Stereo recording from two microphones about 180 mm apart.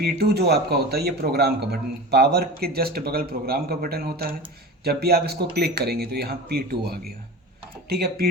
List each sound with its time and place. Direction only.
0.0 s a man's voice: 60° right (ahead or behind)